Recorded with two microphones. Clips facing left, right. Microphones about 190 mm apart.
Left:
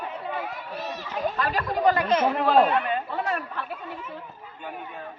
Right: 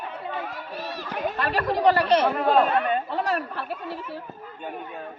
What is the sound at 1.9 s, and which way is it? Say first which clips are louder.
Chatter: right 2 dB; 35° right (ahead or behind).